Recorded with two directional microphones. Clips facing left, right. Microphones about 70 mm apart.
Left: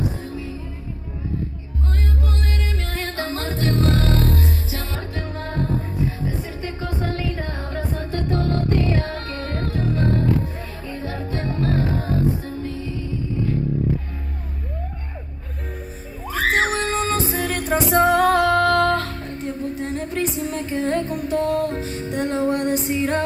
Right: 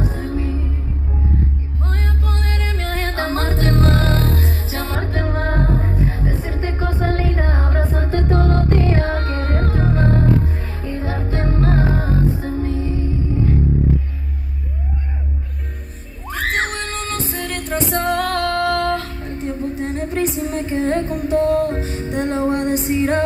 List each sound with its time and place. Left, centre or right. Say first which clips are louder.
0.0 s music: right 4 dB; right
1.9 s music: right 1 dB; right
16.3 s music: left 2 dB; centre